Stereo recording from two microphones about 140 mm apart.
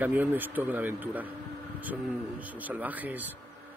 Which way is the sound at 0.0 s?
15° right (ahead or behind).